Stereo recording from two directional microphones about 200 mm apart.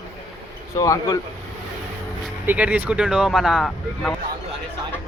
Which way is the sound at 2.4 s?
10° right (ahead or behind).